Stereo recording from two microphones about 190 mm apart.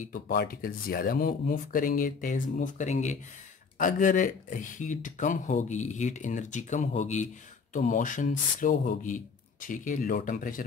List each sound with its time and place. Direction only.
0.0 s speech: 50° left (ahead or behind)